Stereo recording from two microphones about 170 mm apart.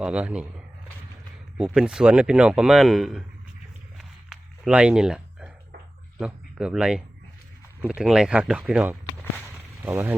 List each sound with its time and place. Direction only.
0.0 s speech: 5° right (ahead or behind)
1.5 s speech: 5° right (ahead or behind)
3.9 s a sound: 5° right (ahead or behind)
6.1 s speech: 5° right (ahead or behind)